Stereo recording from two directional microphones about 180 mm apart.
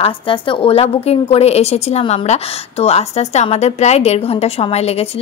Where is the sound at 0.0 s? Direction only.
30° left (ahead or behind).